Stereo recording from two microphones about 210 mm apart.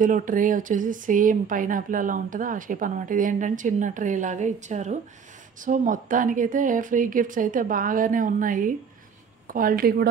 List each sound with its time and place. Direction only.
0.0 s speech: 40° right (ahead or behind)